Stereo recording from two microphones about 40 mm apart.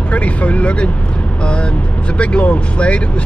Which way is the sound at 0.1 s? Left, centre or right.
Left.